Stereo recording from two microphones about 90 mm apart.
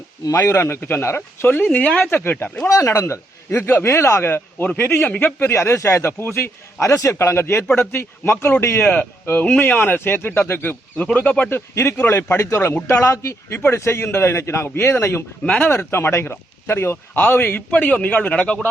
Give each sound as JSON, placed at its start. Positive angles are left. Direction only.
{"t": 0.3, "sound": "speech", "side_deg": 25}
{"t": 2.7, "sound": "a man's voice", "side_deg": 35}
{"t": 15.7, "sound": "speech", "side_deg": 25}